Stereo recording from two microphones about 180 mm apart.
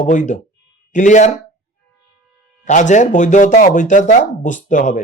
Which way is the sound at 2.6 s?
40° left (ahead or behind).